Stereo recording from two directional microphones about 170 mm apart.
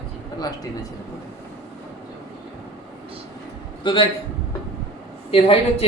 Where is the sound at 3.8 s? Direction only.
25° left (ahead or behind).